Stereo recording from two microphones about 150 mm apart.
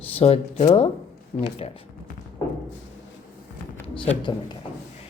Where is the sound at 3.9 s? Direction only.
35° left (ahead or behind).